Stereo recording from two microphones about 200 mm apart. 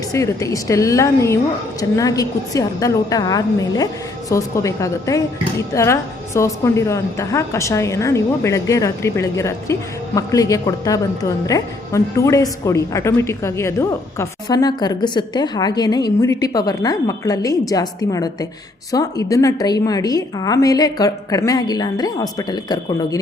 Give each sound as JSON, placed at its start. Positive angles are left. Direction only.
{"t": 0.1, "sound": "a woman's voice", "side_deg": 15}